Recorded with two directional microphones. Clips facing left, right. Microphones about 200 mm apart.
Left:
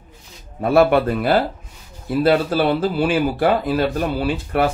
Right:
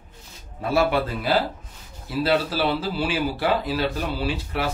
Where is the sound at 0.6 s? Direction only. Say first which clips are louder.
Left 7 dB; 55° left (ahead or behind).